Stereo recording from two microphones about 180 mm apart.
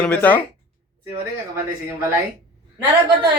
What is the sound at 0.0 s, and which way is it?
Speech, 10° left (ahead or behind).